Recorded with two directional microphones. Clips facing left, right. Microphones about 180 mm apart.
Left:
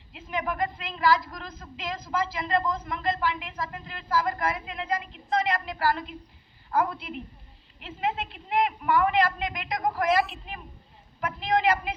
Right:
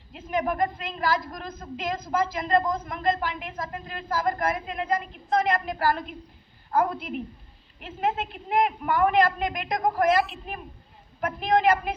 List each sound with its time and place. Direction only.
0.1 s a woman's voice: 45° right (ahead or behind)
10.1 s speech: centre (ahead or behind)
11.2 s a woman's voice: 50° right (ahead or behind)